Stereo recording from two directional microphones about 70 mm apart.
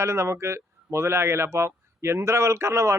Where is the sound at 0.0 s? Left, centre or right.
Right.